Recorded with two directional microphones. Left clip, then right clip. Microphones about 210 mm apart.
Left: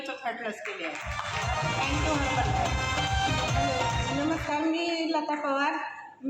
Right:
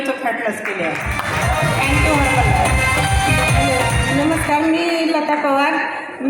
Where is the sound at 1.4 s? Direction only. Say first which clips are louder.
Right 11 dB; 45° right (ahead or behind).